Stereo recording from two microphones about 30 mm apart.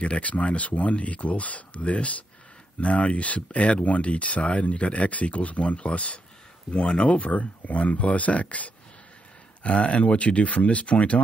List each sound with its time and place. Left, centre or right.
0.0 s speech: left
9.6 s speech: left